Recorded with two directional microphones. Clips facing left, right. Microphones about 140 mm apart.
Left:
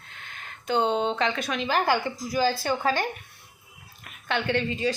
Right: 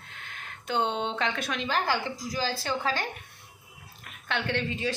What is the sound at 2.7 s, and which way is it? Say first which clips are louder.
Speech: left 4 dB; 40° left (ahead or behind).